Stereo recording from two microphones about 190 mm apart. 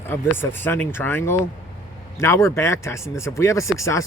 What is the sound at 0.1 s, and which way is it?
Speech, 10° left (ahead or behind).